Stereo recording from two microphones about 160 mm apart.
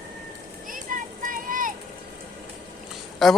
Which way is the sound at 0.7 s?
60° right (ahead or behind).